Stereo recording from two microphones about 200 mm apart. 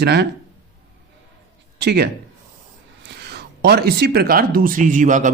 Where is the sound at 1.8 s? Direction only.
55° right (ahead or behind); by 5.3 s 40° right (ahead or behind).